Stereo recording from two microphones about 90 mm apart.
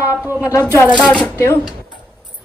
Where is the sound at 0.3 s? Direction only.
35° left (ahead or behind).